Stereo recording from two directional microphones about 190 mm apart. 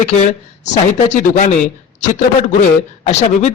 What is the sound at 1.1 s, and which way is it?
Speech, 40° left (ahead or behind).